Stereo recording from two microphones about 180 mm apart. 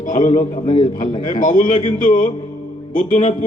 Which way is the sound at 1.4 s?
45° left (ahead or behind).